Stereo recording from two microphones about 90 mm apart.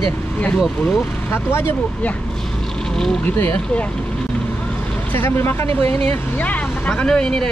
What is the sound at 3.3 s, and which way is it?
Speech, 20° left (ahead or behind).